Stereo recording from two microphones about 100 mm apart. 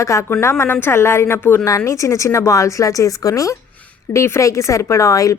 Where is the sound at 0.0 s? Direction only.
30° left (ahead or behind).